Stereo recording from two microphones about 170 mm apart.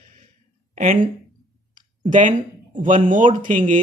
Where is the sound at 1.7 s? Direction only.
50° right (ahead or behind).